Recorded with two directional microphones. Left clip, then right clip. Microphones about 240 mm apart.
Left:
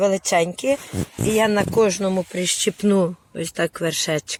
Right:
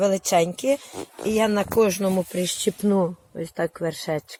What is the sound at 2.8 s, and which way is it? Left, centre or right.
Speech, centre.